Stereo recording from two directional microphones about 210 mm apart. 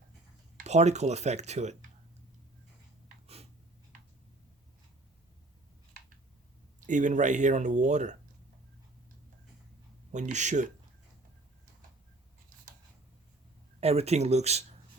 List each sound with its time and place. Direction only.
0.5 s speech: 30° right (ahead or behind)
6.7 s speech: 35° right (ahead or behind)
10.1 s speech: 35° right (ahead or behind)
13.7 s speech: 30° right (ahead or behind)